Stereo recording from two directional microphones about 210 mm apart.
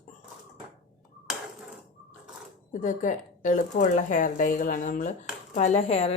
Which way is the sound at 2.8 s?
35° left (ahead or behind).